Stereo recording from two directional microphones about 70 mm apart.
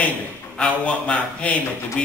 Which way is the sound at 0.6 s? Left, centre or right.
Centre.